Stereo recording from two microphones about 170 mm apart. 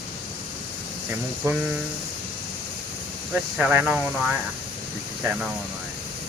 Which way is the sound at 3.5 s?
10° right (ahead or behind).